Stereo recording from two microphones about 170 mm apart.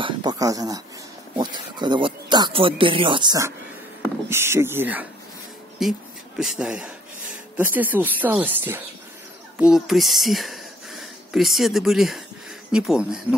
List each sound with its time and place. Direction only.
0.0 s speech: 25° right (ahead or behind); by 13.2 s 5° right (ahead or behind)